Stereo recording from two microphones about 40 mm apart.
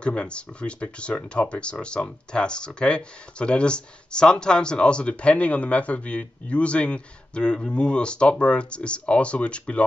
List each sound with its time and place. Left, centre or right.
0.0 s speech: left